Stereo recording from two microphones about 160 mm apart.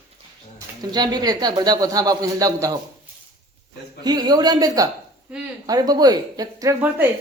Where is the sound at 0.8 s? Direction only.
25° right (ahead or behind).